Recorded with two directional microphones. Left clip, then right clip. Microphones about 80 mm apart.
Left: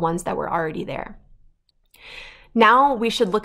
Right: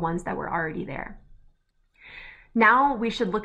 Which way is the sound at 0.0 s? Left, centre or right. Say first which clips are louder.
Left 6 dB; left.